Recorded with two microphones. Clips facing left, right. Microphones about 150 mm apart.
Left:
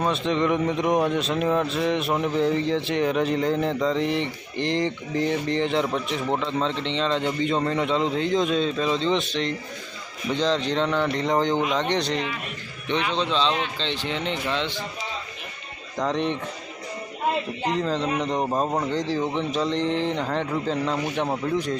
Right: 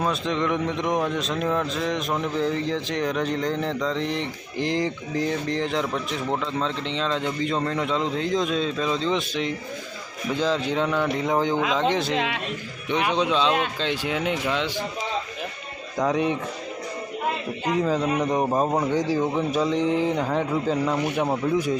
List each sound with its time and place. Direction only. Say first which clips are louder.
0.0 s a man's voice: left 2 dB; centre (ahead or behind)
12.1 s a man's voice: right 2 dB; 90° right
13.1 s speech: right 3 dB; 10° right (ahead or behind)
16.0 s speech: right 2 dB; 5° right (ahead or behind)
17.7 s speech: right 4 dB; 10° right (ahead or behind)